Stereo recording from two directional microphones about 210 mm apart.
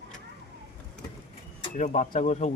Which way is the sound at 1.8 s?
35° left (ahead or behind).